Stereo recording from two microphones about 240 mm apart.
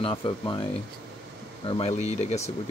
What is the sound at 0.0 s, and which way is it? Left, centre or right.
Speech, centre.